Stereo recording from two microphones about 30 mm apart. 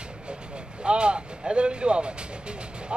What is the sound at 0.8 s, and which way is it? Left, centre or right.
Speech, right.